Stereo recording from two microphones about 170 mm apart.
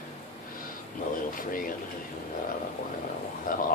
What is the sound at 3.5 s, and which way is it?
Speech, 55° left (ahead or behind).